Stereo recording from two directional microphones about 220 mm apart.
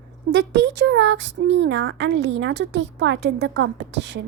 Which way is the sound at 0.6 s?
55° right (ahead or behind).